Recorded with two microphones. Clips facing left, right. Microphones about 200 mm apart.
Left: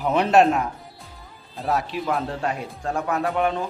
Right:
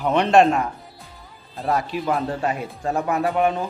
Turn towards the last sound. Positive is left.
turn(degrees=-5)  # may be behind; listen again after turning